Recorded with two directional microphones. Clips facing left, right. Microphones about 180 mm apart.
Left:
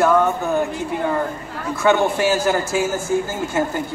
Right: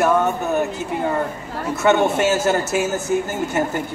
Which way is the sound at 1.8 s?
25° right (ahead or behind).